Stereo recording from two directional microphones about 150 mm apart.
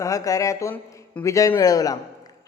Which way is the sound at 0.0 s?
20° left (ahead or behind).